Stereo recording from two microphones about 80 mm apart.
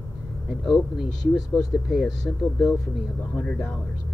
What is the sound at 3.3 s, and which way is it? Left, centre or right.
Speech, centre.